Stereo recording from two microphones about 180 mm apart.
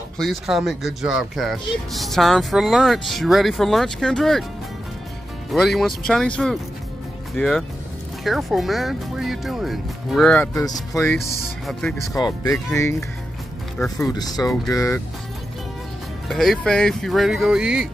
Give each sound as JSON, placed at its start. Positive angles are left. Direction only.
{"t": 0.2, "sound": "speech", "side_deg": 0}
{"t": 5.5, "sound": "speech", "side_deg": 0}
{"t": 12.2, "sound": "speech", "side_deg": 20}
{"t": 13.8, "sound": "speech", "side_deg": 0}
{"t": 14.1, "sound": "speech", "side_deg": 20}
{"t": 16.3, "sound": "speech", "side_deg": 0}